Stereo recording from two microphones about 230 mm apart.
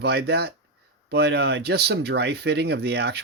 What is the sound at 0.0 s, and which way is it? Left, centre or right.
Speech, right.